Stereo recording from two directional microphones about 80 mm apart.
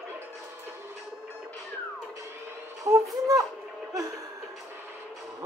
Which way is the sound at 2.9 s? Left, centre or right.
Right.